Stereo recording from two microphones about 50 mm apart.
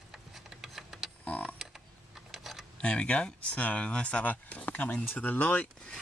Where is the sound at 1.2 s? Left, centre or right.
Left.